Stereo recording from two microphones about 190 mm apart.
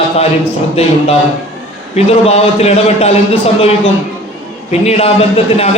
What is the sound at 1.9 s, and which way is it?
A man's voice, 35° left (ahead or behind).